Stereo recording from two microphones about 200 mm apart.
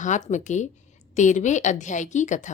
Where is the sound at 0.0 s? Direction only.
35° left (ahead or behind).